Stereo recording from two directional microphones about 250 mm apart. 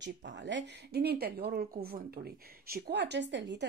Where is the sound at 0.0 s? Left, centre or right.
Right.